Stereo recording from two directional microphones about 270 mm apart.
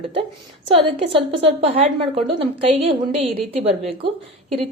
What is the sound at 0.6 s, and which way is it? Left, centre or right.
A woman's voice, centre.